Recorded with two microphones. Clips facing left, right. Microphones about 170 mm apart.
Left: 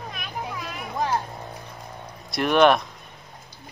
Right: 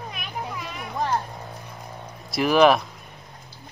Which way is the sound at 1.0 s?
Centre (ahead or behind).